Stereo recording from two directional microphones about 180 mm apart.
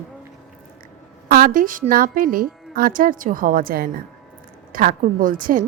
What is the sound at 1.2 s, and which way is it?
A woman's voice, 55° right (ahead or behind).